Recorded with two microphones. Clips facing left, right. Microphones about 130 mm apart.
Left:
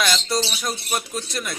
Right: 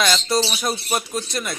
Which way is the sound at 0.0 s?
Centre (ahead or behind).